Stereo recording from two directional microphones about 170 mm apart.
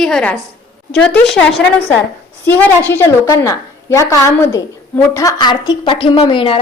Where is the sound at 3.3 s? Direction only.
20° left (ahead or behind).